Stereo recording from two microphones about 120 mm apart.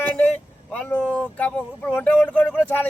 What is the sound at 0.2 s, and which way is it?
Speech, 10° left (ahead or behind).